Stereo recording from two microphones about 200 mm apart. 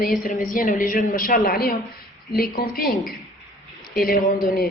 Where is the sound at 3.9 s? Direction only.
50° left (ahead or behind).